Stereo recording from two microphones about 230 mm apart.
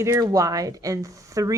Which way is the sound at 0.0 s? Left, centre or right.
Centre.